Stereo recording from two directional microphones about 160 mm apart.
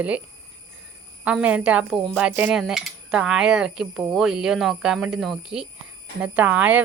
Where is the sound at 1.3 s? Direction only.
10° right (ahead or behind).